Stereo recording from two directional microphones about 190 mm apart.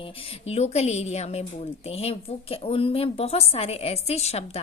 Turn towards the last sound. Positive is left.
turn(degrees=35)  # may be behind; listen again after turning